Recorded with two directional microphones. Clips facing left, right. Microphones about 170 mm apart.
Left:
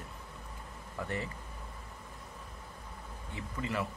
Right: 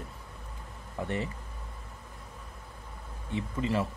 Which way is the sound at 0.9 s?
25° right (ahead or behind).